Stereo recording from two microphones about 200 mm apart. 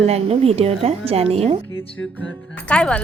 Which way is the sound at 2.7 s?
5° left (ahead or behind).